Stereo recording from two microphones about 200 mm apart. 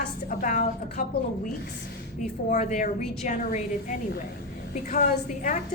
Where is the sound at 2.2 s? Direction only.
40° left (ahead or behind).